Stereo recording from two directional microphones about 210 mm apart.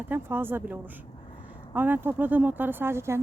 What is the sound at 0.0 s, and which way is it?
Speech, 10° right (ahead or behind).